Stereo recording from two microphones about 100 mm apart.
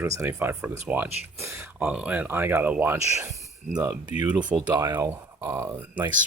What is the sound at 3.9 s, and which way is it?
Speech, 15° right (ahead or behind).